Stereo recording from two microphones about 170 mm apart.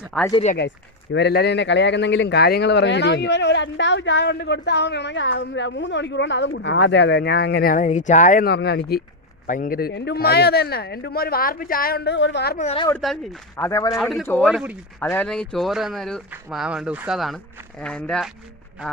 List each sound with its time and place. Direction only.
0.1 s speech: 5° left (ahead or behind)
1.1 s speech: 75° left (ahead or behind); by 8.4 s 45° left (ahead or behind)
8.4 s speech: 75° left (ahead or behind)
9.5 s speech: 55° left (ahead or behind); by 12.5 s 80° left
13.0 s speech: centre (ahead or behind)
13.6 s a man's voice: 20° left (ahead or behind)
13.9 s speech: centre (ahead or behind)
14.5 s speech: 5° right (ahead or behind)
15.1 s speech: 5° left (ahead or behind)